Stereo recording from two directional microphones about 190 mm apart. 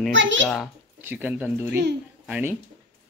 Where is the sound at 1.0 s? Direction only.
10° right (ahead or behind).